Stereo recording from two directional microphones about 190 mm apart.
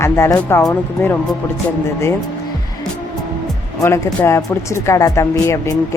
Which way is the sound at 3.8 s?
15° left (ahead or behind).